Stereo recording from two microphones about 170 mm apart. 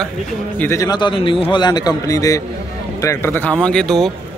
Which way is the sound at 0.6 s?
20° left (ahead or behind).